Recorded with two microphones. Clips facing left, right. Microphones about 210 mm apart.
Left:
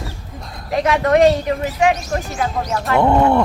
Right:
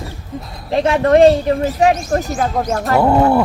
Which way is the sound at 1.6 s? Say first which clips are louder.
Right 3 dB; 45° right (ahead or behind).